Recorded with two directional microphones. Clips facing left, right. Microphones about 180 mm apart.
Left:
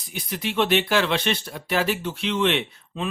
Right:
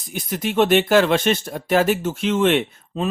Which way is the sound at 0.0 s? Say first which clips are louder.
Right 5 dB; 45° right (ahead or behind).